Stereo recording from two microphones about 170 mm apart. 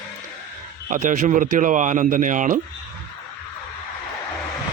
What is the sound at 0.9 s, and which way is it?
A man's voice, 50° right (ahead or behind).